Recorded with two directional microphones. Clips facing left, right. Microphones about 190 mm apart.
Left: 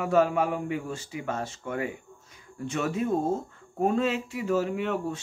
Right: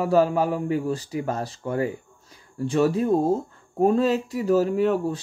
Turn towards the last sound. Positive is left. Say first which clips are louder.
# right 7 dB
turn(degrees=-40)  # may be behind; listen again after turning